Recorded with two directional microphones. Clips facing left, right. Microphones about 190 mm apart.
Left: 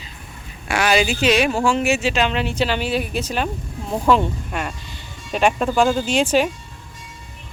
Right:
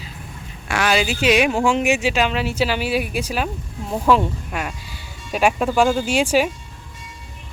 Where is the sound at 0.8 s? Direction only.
Centre (ahead or behind).